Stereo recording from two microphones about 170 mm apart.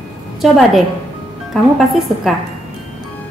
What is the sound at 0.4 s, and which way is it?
Speech, centre (ahead or behind).